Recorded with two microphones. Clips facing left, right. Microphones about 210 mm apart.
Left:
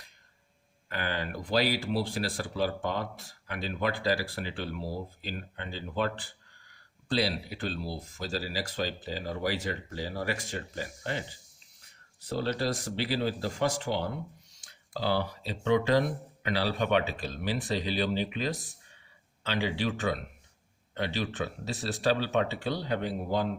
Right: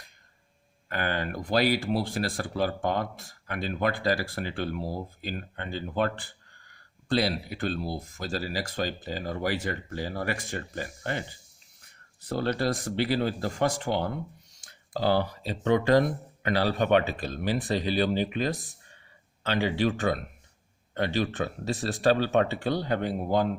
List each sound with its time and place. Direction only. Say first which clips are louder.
0.9 s speech: right 3 dB; 50° right (ahead or behind)
14.6 s a sound: right 5 dB; 50° right (ahead or behind)
15.6 s speech: right 3 dB; 50° right (ahead or behind)